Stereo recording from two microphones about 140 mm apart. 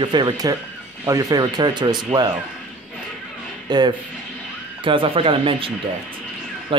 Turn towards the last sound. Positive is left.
turn(degrees=-40)  # may be behind; listen again after turning